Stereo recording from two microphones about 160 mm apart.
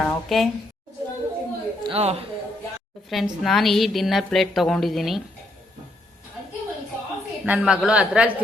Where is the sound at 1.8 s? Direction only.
40° right (ahead or behind).